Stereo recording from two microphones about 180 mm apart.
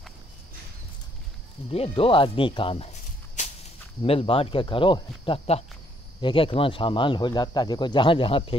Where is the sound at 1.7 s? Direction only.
35° left (ahead or behind).